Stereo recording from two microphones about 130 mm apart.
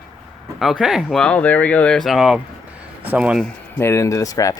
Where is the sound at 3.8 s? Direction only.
20° left (ahead or behind).